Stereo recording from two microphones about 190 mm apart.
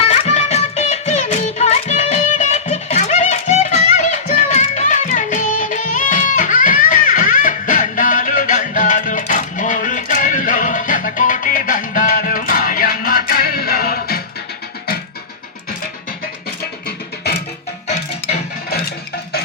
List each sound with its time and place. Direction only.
0.1 s music: 35° left (ahead or behind); by 14.2 s 50° left (ahead or behind)
17.8 s music: 35° left (ahead or behind)